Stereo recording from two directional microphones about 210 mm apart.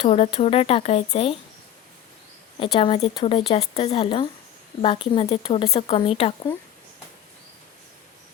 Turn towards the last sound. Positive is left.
turn(degrees=25)  # may be behind; listen again after turning